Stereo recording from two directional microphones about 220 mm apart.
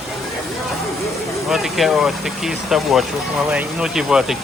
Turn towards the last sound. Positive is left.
turn(degrees=-5)  # may be behind; listen again after turning